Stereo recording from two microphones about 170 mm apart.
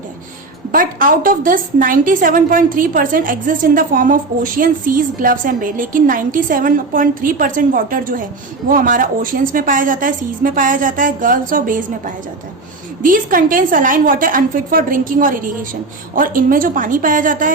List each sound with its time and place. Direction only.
0.7 s a woman's voice: 55° right (ahead or behind)